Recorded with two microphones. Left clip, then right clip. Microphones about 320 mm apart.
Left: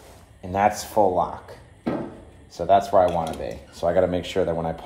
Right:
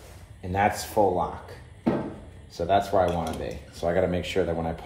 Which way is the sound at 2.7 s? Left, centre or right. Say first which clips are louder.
Left 5 dB; centre.